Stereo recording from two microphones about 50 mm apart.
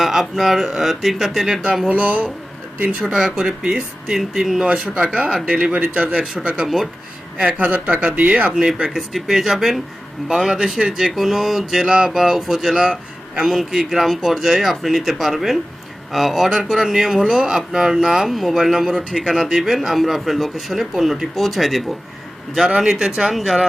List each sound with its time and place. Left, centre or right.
0.0 s a man's voice: centre
1.6 s speech: centre
1.9 s speech: right
3.0 s speech: centre
4.6 s speech: centre
8.5 s speech: centre
13.4 s a man's voice: centre
22.5 s speech: centre